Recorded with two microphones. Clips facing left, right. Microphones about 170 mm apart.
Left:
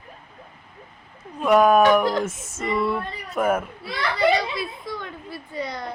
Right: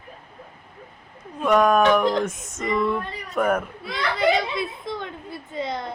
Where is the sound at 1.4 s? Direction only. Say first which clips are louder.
Left 2 dB; 5° left (ahead or behind).